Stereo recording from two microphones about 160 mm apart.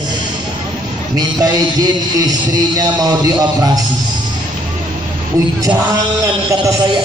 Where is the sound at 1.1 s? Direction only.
25° right (ahead or behind).